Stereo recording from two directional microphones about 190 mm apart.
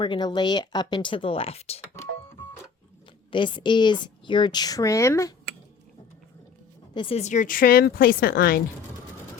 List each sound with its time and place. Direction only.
0.0 s a woman's voice: 25° left (ahead or behind)
3.3 s a woman's voice: 25° left (ahead or behind)
6.9 s speech: 30° left (ahead or behind); by 8.6 s 50° left (ahead or behind)